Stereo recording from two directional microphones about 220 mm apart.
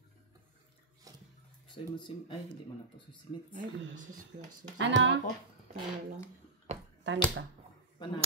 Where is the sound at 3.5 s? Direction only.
35° right (ahead or behind).